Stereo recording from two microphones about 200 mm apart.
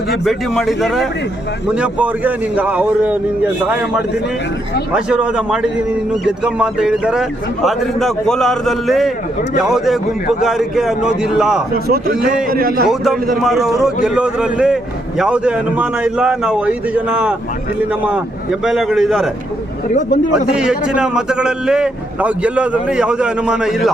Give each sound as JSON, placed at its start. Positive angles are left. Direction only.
{"t": 0.3, "sound": "a man's voice", "side_deg": 0}
{"t": 4.9, "sound": "a man's voice", "side_deg": -5}
{"t": 11.7, "sound": "a man's voice", "side_deg": -50}
{"t": 13.3, "sound": "a man's voice", "side_deg": 0}
{"t": 18.6, "sound": "a man's voice", "side_deg": 0}
{"t": 20.3, "sound": "a man's voice", "side_deg": -5}